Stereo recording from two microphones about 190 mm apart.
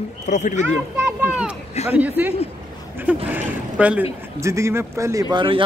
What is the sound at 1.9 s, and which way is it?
A woman's voice, 10° right (ahead or behind).